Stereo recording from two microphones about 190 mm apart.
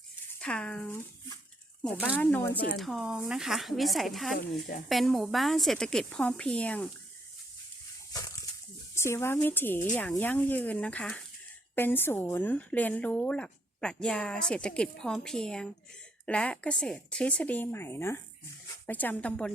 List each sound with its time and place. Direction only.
0.3 s speech: 5° left (ahead or behind)
2.1 s speech: 10° left (ahead or behind)
2.7 s a woman's voice: centre (ahead or behind)
8.1 s a sound: 20° left (ahead or behind)
9.0 s a woman's voice: 15° left (ahead or behind)